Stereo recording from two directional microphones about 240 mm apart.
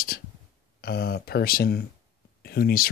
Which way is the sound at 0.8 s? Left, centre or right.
Left.